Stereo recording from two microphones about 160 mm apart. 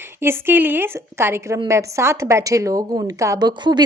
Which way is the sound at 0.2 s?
15° right (ahead or behind).